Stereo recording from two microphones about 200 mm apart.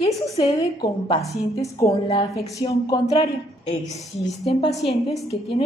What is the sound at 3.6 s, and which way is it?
Speech, 30° left (ahead or behind).